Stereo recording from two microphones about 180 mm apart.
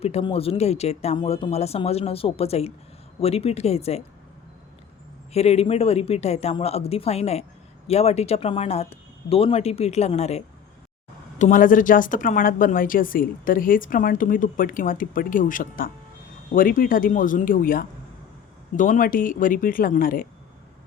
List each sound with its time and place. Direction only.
0.0 s speech: 35° left (ahead or behind)
5.3 s a woman's voice: 35° left (ahead or behind); by 20.2 s 50° left (ahead or behind)